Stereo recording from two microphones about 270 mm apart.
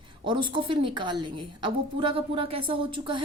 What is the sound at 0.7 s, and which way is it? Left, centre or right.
A woman's voice, centre.